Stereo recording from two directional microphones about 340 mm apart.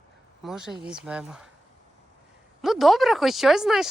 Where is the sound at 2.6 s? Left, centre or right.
Centre.